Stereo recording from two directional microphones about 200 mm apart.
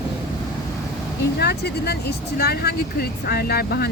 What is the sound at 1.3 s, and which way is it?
Speech, 55° left (ahead or behind).